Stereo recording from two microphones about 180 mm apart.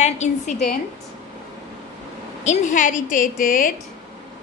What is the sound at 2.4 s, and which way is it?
A woman's voice, 40° left (ahead or behind).